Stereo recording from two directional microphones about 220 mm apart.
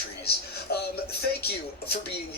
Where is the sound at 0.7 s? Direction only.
45° left (ahead or behind).